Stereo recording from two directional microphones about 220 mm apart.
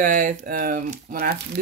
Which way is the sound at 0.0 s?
40° right (ahead or behind).